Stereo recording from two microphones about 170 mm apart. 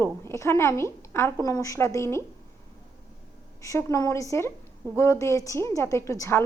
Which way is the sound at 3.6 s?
20° left (ahead or behind).